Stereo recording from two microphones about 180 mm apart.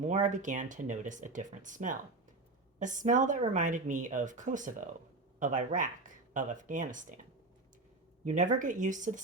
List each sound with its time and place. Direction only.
0.0 s speech: 45° right (ahead or behind)
8.2 s speech: 45° right (ahead or behind)